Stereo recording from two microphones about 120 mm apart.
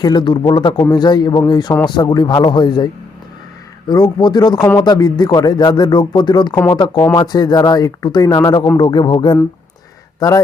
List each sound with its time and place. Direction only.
0.0 s a man's voice: 40° left (ahead or behind)
10.2 s a man's voice: 30° left (ahead or behind)